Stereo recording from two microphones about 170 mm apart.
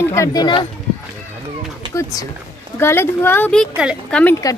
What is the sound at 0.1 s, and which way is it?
Speech, 20° left (ahead or behind).